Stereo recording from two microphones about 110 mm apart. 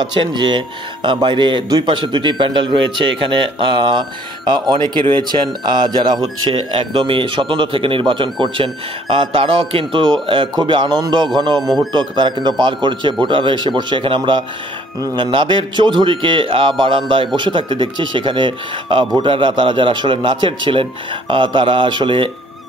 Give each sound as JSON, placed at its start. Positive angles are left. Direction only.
{"t": 0.2, "sound": "a man's voice", "side_deg": -45}
{"t": 11.6, "sound": "speech", "side_deg": 0}
{"t": 11.9, "sound": "a man's voice", "side_deg": -45}